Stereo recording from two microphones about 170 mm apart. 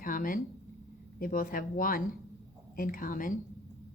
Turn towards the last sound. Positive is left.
turn(degrees=50)  # may be behind; listen again after turning